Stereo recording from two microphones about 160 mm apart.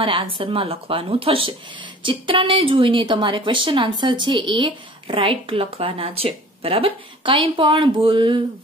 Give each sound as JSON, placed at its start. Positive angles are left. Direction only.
{"t": 0.0, "sound": "speech", "side_deg": -30}